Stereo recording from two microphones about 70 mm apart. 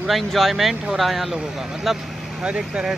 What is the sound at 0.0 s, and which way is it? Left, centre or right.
Speech, centre.